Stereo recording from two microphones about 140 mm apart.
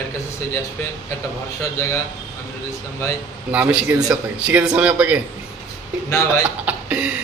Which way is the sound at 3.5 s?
10° right (ahead or behind).